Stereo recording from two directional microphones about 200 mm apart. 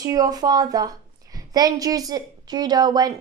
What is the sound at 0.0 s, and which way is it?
A woman's voice, 20° right (ahead or behind).